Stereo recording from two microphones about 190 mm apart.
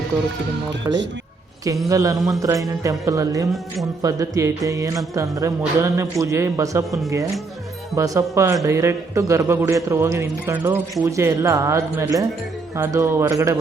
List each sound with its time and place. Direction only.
0.9 s a man's voice: 15° right (ahead or behind)
7.9 s a man's voice: 15° right (ahead or behind)